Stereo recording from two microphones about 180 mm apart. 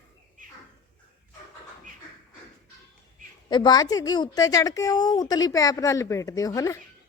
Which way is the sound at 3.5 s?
25° left (ahead or behind).